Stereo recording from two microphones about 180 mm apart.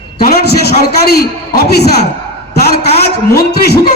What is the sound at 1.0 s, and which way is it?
Speech, 60° left (ahead or behind).